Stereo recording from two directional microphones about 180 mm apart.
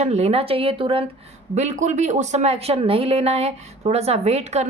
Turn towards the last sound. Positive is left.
turn(degrees=-35)  # may be behind; listen again after turning